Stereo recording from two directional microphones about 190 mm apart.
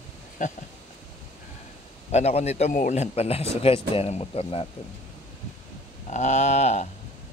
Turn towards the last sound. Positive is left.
turn(degrees=35)  # may be behind; listen again after turning